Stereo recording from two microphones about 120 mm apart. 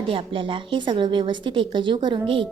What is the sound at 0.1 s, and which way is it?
A woman's voice, 45° right (ahead or behind).